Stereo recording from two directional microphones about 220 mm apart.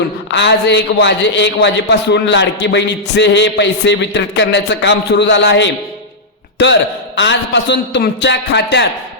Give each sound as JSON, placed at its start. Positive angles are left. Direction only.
{"t": 0.3, "sound": "a man's voice", "side_deg": 55}